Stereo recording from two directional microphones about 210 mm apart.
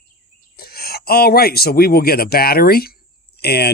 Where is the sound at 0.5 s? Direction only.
45° left (ahead or behind).